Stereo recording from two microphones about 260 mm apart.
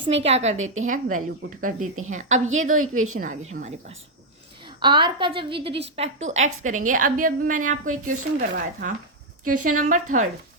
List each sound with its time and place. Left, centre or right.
0.0 s a woman's voice: right
0.6 s a woman's voice: right
0.9 s a woman's voice: right